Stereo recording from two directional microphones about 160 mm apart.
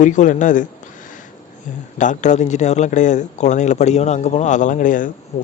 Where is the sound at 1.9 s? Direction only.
50° left (ahead or behind).